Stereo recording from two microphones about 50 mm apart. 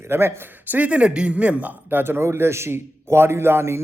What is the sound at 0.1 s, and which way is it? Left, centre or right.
Speech, right.